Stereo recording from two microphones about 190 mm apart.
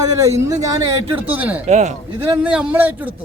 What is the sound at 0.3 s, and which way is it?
A man's voice, 15° right (ahead or behind).